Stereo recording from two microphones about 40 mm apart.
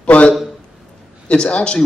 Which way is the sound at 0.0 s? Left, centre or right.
Left.